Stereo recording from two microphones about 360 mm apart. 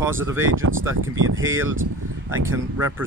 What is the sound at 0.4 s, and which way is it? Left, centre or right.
Speech, right.